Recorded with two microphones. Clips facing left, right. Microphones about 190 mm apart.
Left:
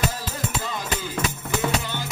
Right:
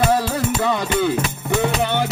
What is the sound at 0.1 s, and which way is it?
Music, 70° right (ahead or behind).